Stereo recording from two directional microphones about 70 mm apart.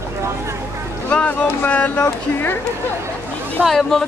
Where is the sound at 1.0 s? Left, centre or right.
Left.